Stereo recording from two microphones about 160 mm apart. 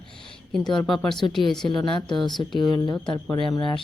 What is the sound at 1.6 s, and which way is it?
Speech, 30° left (ahead or behind).